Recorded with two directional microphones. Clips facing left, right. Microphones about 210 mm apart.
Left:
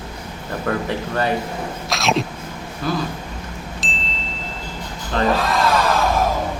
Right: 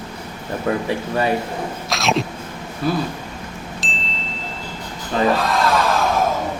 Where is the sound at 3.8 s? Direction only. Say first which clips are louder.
Left 1 dB; centre (ahead or behind).